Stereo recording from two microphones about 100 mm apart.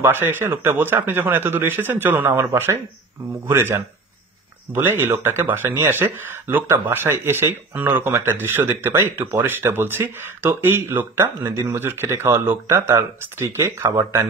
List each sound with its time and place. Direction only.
0.0 s speech: 20° right (ahead or behind)